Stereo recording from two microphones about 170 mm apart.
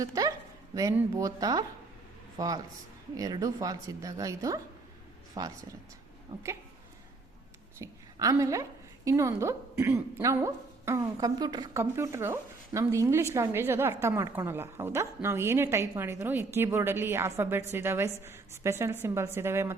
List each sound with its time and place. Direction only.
0.0 s a sound: 20° right (ahead or behind)
0.9 s a woman's voice: 20° right (ahead or behind)
7.8 s a woman's voice: 20° right (ahead or behind)